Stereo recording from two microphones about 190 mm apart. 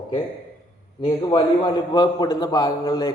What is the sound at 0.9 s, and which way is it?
A man's voice, 25° left (ahead or behind).